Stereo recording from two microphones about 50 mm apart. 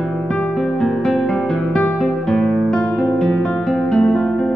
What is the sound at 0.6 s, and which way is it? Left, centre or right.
Music, centre.